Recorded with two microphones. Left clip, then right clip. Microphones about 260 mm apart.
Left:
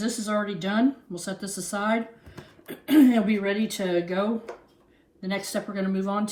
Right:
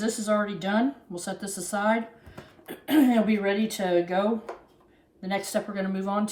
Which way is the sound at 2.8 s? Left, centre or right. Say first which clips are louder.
Left 2 dB; right.